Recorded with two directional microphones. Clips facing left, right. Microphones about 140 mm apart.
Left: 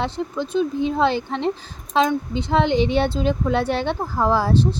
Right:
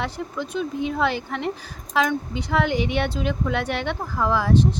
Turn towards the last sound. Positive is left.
turn(degrees=30)  # may be behind; listen again after turning